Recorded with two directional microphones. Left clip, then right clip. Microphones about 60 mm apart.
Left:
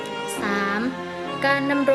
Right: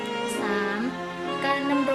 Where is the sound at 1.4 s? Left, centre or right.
Left.